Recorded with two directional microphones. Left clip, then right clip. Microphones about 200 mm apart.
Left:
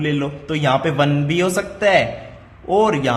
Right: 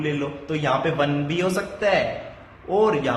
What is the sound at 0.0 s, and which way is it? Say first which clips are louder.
A man's voice: left 4 dB; 30° left (ahead or behind).